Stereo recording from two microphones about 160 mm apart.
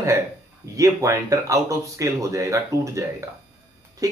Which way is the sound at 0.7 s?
20° right (ahead or behind).